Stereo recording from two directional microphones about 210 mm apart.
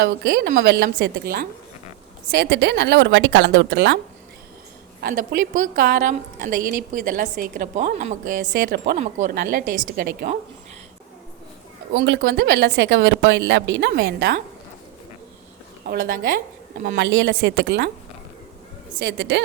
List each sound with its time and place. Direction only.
0.0 s a woman's voice: 50° right (ahead or behind)
4.9 s a woman's voice: 45° right (ahead or behind)
11.9 s speech: 55° right (ahead or behind)
15.9 s a woman's voice: 45° right (ahead or behind)
17.0 s speech: 55° right (ahead or behind)
18.9 s speech: 55° right (ahead or behind)